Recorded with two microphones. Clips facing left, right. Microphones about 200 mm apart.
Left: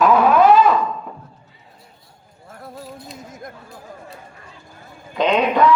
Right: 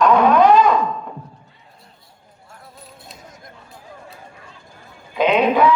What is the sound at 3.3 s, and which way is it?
Chatter, 50° left (ahead or behind).